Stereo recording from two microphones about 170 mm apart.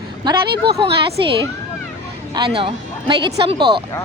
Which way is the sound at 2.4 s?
30° right (ahead or behind).